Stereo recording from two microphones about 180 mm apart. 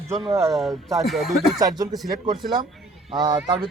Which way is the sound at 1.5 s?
20° right (ahead or behind).